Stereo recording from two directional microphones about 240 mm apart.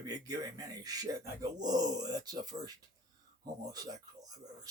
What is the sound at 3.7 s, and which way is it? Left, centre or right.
Speech, centre.